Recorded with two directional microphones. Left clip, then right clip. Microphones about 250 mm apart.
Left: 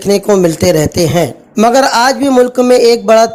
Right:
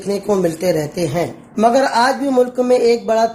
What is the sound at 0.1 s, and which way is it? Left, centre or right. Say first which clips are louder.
A woman's voice: left 8 dB; left.